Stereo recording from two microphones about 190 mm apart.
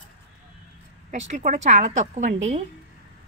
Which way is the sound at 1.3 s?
40° right (ahead or behind).